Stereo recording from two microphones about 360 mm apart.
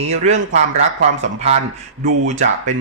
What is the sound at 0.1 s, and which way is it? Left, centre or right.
Speech, centre.